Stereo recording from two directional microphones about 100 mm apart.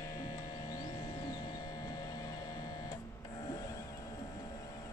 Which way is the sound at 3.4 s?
40° left (ahead or behind).